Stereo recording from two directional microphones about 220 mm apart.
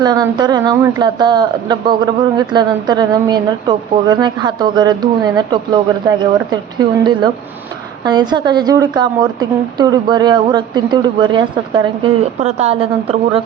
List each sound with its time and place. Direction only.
0.0 s speech: 20° right (ahead or behind)